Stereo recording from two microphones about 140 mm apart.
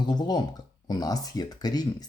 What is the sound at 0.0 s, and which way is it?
Speech, 30° left (ahead or behind).